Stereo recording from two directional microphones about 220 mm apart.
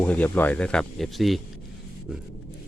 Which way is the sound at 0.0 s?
5° left (ahead or behind).